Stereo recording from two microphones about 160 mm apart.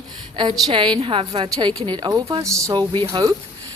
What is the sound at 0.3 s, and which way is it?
A woman's voice, 30° right (ahead or behind).